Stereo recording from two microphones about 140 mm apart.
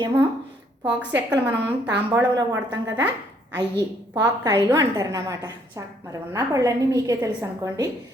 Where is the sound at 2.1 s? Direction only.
20° right (ahead or behind).